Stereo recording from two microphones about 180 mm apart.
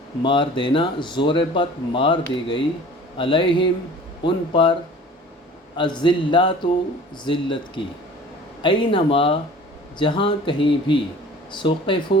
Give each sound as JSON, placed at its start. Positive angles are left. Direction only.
{"t": 0.2, "sound": "speech", "side_deg": 25}
{"t": 8.6, "sound": "speech", "side_deg": 30}